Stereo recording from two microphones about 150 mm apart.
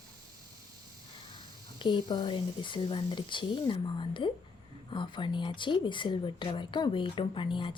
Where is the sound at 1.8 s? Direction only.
30° left (ahead or behind).